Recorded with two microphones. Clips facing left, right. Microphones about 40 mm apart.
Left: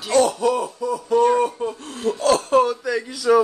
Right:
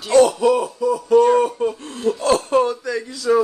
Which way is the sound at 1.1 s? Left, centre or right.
Centre.